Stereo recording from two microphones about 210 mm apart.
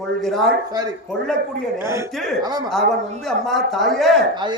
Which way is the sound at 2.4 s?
20° right (ahead or behind).